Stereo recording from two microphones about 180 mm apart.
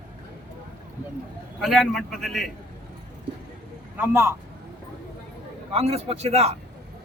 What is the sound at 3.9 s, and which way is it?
Speech, 15° right (ahead or behind).